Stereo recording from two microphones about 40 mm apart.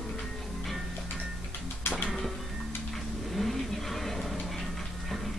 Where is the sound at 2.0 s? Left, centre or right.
Centre.